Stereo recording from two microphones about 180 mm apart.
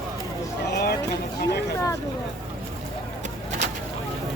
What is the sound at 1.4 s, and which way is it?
Vehicle, 65° left (ahead or behind).